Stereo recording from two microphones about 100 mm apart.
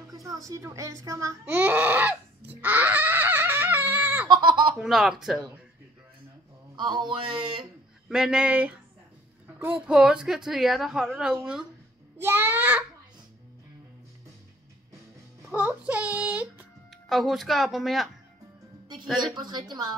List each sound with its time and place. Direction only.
0.1 s music: 40° right (ahead or behind)
0.5 s a child's voice: 30° right (ahead or behind)
1.6 s a sound: 20° right (ahead or behind)
4.3 s a sound: 50° right (ahead or behind)
4.7 s a woman's voice: 5° right (ahead or behind)
6.8 s speech: 50° right (ahead or behind)
8.1 s a woman's voice: 5° right (ahead or behind)
12.2 s a child's voice: 20° right (ahead or behind)
15.5 s child singing: 15° right (ahead or behind)
16.9 s a woman's voice: centre (ahead or behind)
19.3 s speech: 45° right (ahead or behind)